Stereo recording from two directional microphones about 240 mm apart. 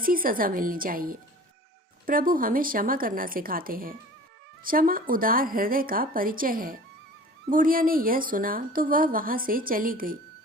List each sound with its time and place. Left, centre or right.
0.0 s speech: right